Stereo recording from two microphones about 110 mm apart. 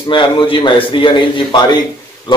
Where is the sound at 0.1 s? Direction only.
50° left (ahead or behind).